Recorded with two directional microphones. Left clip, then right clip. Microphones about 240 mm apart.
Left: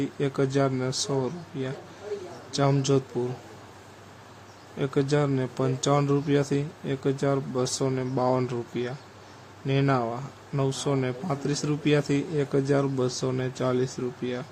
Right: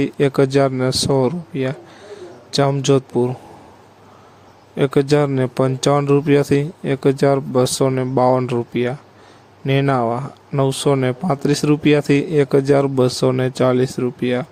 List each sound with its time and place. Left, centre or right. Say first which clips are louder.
0.0 s speech: right 11 dB; right
4.8 s speech: right 10 dB; right